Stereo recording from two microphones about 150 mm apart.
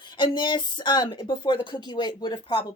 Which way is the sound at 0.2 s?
30° left (ahead or behind).